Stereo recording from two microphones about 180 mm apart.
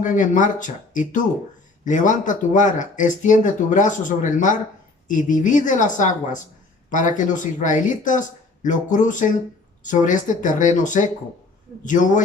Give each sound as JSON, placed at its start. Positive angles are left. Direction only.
{"t": 0.0, "sound": "speech", "side_deg": 45}